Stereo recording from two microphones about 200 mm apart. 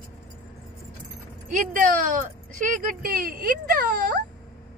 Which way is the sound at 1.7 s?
40° right (ahead or behind).